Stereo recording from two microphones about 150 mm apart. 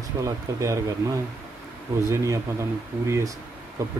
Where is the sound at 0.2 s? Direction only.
20° right (ahead or behind).